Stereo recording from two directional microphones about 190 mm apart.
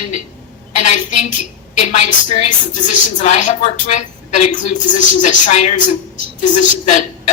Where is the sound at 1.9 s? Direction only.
35° left (ahead or behind).